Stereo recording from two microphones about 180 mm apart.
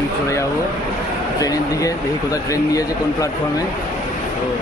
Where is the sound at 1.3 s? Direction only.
20° left (ahead or behind).